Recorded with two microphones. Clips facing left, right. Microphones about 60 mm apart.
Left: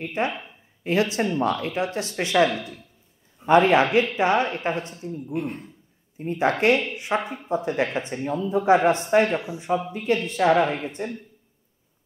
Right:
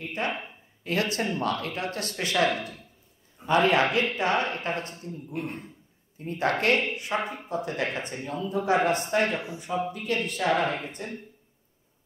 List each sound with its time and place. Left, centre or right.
0.0 s speech: left
2.5 s speech: right
3.4 s speech: left